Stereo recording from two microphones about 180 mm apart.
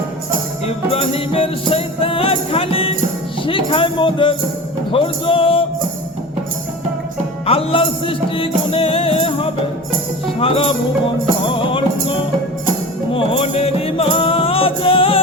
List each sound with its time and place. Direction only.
0.7 s music: 30° left (ahead or behind)
3.4 s speech: 30° left (ahead or behind)
4.9 s music: 30° left (ahead or behind)
7.4 s music: 30° left (ahead or behind)
13.1 s music: 30° left (ahead or behind)